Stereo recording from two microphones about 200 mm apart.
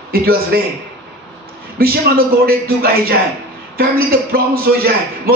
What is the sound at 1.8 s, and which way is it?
A man's voice, 50° right (ahead or behind).